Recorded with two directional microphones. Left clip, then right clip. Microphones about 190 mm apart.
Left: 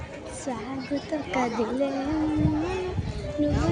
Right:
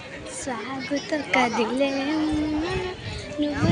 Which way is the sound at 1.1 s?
5° right (ahead or behind).